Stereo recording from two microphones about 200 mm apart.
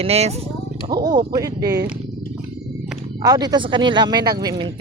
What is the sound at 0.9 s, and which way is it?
Speech, 20° right (ahead or behind).